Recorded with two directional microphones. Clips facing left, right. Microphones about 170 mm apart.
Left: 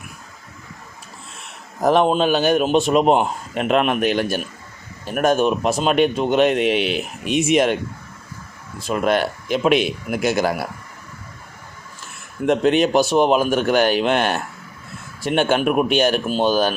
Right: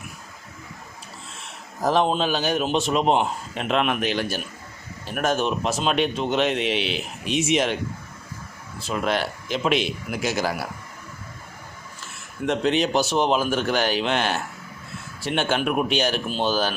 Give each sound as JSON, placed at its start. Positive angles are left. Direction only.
{"t": 1.8, "sound": "speech", "side_deg": 60}
{"t": 8.9, "sound": "speech", "side_deg": 50}
{"t": 12.5, "sound": "speech", "side_deg": 50}